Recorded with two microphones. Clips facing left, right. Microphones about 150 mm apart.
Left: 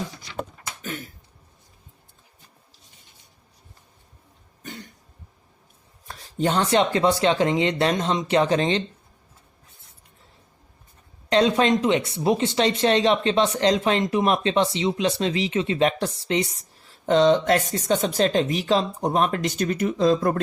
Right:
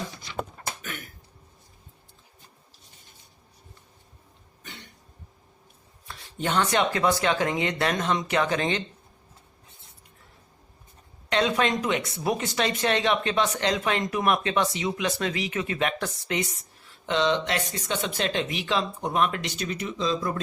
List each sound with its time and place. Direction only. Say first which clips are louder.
0.8 s a sound: left 5 dB; 30° left (ahead or behind)
4.6 s cough: left 7 dB; 40° left (ahead or behind)
6.1 s speech: left 6 dB; 40° left (ahead or behind)
11.3 s speech: left 5 dB; 30° left (ahead or behind); by 20.4 s 55° left (ahead or behind)